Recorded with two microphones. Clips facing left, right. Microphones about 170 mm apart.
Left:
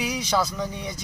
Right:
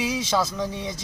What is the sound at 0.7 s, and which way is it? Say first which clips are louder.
Speech: right 2 dB; 25° right (ahead or behind).